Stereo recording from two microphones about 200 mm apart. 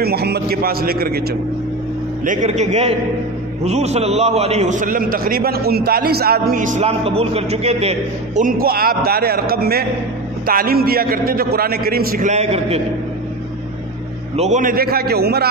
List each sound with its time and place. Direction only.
0.0 s a man's voice: 55° right (ahead or behind)
2.2 s a man's voice: 35° right (ahead or behind)
8.5 s a man's voice: 50° right (ahead or behind); by 12.8 s 30° right (ahead or behind)
14.3 s a man's voice: 35° right (ahead or behind); by 15.4 s 50° right (ahead or behind)